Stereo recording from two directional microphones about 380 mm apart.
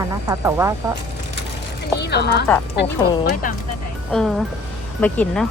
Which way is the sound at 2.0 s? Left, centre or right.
Left.